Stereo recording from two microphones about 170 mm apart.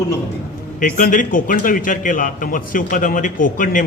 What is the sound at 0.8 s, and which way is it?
A man's voice, 55° left (ahead or behind).